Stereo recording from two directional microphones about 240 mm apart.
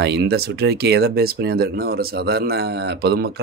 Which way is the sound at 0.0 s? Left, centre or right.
Right.